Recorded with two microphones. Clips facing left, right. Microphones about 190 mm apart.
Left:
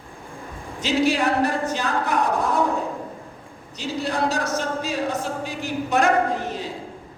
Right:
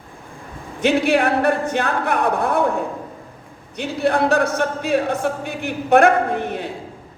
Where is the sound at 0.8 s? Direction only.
60° right (ahead or behind).